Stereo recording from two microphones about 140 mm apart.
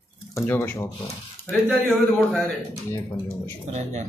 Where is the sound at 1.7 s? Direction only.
15° right (ahead or behind).